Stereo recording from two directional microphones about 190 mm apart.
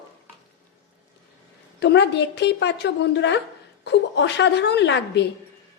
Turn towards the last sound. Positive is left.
turn(degrees=65)  # may be behind; listen again after turning